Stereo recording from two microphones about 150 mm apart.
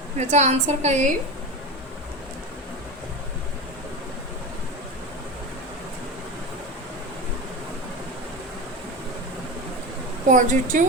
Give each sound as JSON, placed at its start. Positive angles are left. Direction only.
{"t": 0.2, "sound": "a woman's voice", "side_deg": -50}
{"t": 10.2, "sound": "a woman's voice", "side_deg": -60}